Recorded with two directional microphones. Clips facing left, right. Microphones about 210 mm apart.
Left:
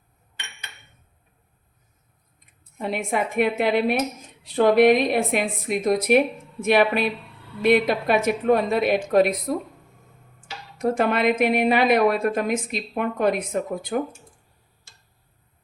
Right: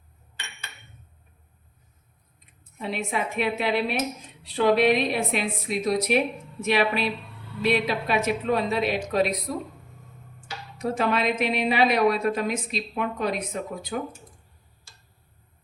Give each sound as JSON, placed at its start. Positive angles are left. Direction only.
{"t": 2.7, "sound": "a woman's voice", "side_deg": 50}
{"t": 10.8, "sound": "a woman's voice", "side_deg": 55}